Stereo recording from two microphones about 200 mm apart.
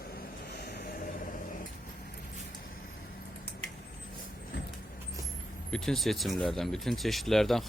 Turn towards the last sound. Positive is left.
turn(degrees=0)  # may be behind; listen again after turning